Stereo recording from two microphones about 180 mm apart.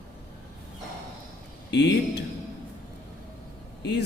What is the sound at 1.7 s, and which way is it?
Speech, 70° left (ahead or behind).